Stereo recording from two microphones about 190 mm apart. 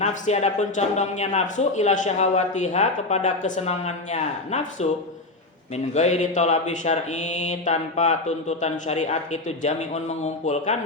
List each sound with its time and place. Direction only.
0.0 s a man's voice: 35° left (ahead or behind)